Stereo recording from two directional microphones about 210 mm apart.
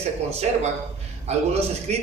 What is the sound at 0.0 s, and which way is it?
A man's voice, 30° right (ahead or behind).